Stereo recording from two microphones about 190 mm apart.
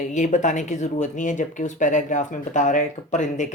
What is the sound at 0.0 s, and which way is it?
Speech, 40° left (ahead or behind).